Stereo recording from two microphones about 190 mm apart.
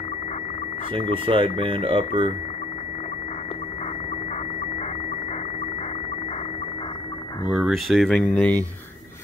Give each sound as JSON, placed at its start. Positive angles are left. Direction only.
{"t": 1.2, "sound": "speech", "side_deg": -30}
{"t": 7.4, "sound": "speech", "side_deg": 0}